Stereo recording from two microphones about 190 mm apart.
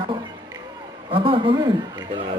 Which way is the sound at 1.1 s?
30° right (ahead or behind).